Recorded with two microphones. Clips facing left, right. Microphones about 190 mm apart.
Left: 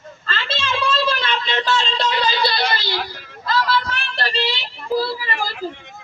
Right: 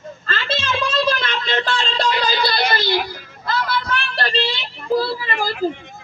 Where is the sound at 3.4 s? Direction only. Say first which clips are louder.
Left 2 dB; 55° right (ahead or behind).